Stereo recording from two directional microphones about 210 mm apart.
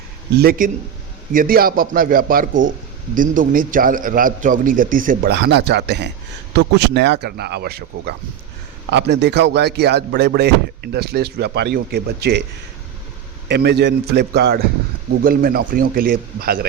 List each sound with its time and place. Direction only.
0.3 s speech: 45° right (ahead or behind)
2.5 s speech: 65° right (ahead or behind)
3.2 s a man's voice: 40° right (ahead or behind)
13.5 s speech: 50° right (ahead or behind)